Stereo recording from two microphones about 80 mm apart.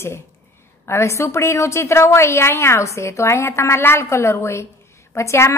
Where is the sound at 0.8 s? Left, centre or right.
Left.